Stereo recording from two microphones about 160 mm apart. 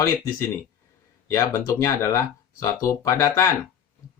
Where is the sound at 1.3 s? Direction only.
20° left (ahead or behind).